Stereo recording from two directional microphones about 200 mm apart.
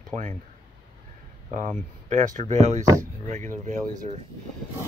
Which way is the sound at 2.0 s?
35° right (ahead or behind).